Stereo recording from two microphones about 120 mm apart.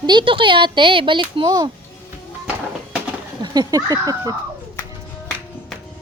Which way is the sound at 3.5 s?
30° right (ahead or behind).